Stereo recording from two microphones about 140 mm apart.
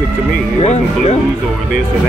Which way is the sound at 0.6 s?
50° left (ahead or behind).